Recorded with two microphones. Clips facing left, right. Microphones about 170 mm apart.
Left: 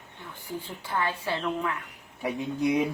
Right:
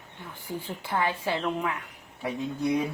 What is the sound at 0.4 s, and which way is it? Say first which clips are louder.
A woman's voice: right 2 dB; 15° right (ahead or behind).